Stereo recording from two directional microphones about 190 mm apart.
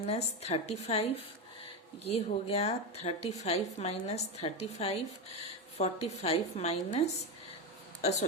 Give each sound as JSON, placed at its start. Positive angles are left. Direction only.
{"t": 0.0, "sound": "a woman's voice", "side_deg": 35}